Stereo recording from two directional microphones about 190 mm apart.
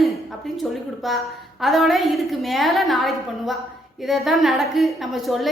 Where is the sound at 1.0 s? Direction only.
Centre (ahead or behind).